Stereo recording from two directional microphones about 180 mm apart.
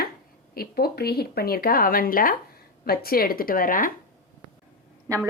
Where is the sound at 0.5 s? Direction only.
60° left (ahead or behind).